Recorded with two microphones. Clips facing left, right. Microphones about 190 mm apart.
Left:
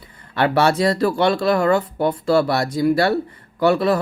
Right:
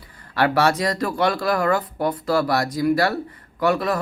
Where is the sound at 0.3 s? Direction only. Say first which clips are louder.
Left 2 dB; 25° left (ahead or behind).